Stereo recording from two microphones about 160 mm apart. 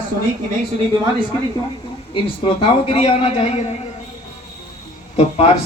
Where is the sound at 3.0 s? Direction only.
35° left (ahead or behind).